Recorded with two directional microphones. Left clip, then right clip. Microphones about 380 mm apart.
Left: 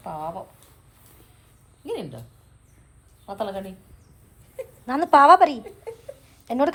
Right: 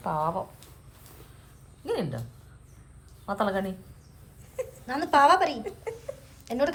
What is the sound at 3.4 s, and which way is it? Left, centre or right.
Speech, right.